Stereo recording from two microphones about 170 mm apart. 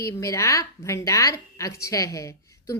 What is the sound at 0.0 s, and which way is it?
Speech, 15° left (ahead or behind).